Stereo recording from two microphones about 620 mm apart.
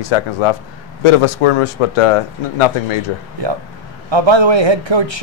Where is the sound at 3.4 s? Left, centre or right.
Right.